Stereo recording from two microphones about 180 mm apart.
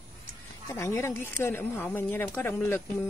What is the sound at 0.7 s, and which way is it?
Speech, 15° left (ahead or behind).